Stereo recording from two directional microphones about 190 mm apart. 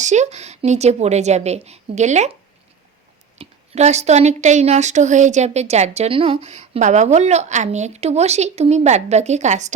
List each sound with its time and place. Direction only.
0.0 s a woman's voice: 40° right (ahead or behind)
3.3 s a woman's voice: 35° right (ahead or behind)